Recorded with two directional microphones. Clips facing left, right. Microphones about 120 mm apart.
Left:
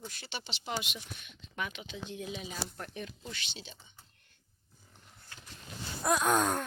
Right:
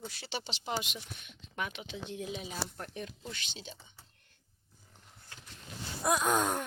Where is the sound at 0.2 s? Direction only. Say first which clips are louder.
Right 3 dB; 35° right (ahead or behind).